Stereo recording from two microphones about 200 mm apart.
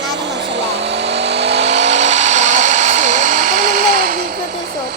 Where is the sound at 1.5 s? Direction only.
35° right (ahead or behind).